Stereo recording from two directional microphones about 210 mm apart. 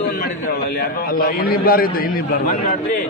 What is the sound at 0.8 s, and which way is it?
A man's voice, 45° left (ahead or behind).